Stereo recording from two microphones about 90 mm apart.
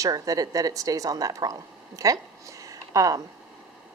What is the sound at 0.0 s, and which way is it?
A woman's voice, 40° right (ahead or behind).